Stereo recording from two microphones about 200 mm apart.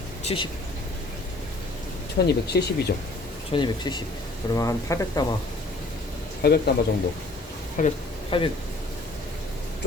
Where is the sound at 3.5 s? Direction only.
20° left (ahead or behind).